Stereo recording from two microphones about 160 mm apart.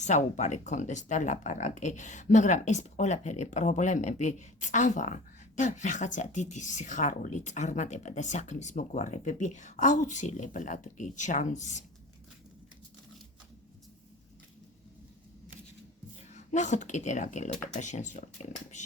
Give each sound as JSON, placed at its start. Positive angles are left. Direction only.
{"t": 0.0, "sound": "speech", "side_deg": 45}
{"t": 16.3, "sound": "speech", "side_deg": 50}